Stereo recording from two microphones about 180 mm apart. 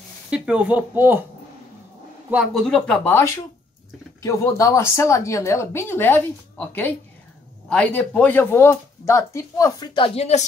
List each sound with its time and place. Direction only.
0.3 s speech: 5° right (ahead or behind)
2.3 s speech: centre (ahead or behind); by 10.4 s 35° left (ahead or behind)